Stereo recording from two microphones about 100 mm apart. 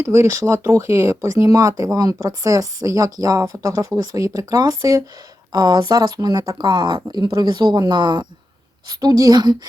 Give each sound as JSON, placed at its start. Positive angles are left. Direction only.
{"t": 0.0, "sound": "a woman's voice", "side_deg": -30}
{"t": 6.7, "sound": "speech", "side_deg": -50}
{"t": 8.9, "sound": "a woman's voice", "side_deg": -40}